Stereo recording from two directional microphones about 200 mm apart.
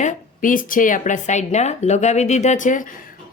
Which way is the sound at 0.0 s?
40° left (ahead or behind).